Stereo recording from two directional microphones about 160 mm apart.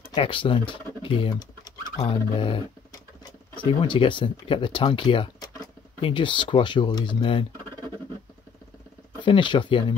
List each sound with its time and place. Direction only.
0.1 s speech: 30° left (ahead or behind)
9.2 s speech: 30° left (ahead or behind)